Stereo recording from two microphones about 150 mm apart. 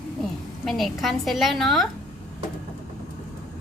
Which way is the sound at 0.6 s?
Centre (ahead or behind).